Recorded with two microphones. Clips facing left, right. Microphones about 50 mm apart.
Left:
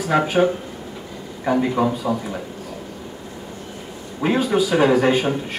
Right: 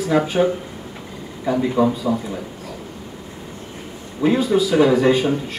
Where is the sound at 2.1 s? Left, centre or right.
Centre.